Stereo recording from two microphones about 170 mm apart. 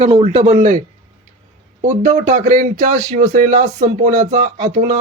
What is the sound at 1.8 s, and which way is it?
A man's voice, 45° right (ahead or behind).